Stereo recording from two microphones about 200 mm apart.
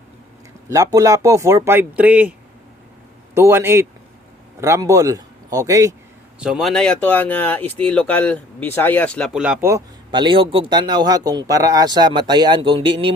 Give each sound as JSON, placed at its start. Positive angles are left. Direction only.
{"t": 0.7, "sound": "speech", "side_deg": -15}
{"t": 3.3, "sound": "speech", "side_deg": -10}
{"t": 6.4, "sound": "speech", "side_deg": 0}